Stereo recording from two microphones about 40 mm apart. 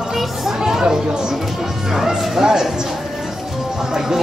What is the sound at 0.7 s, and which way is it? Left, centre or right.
Chatter, centre.